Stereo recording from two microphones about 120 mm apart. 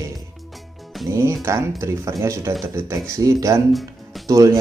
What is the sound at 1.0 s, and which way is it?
Speech, 25° right (ahead or behind).